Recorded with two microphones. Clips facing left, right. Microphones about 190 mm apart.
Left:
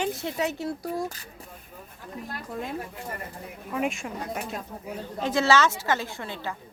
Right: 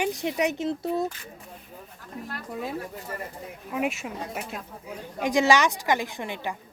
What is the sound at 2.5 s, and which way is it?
Speech, 5° right (ahead or behind).